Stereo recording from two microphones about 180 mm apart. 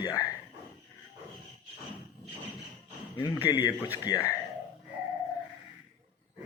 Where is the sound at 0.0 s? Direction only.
15° left (ahead or behind).